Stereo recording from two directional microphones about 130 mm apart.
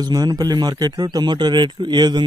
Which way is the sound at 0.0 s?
30° right (ahead or behind).